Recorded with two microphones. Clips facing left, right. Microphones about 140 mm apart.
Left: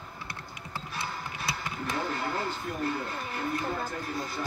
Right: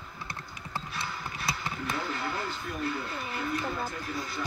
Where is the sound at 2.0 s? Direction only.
45° left (ahead or behind).